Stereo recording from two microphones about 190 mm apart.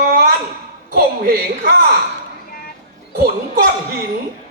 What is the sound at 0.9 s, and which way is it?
Speech, 50° right (ahead or behind).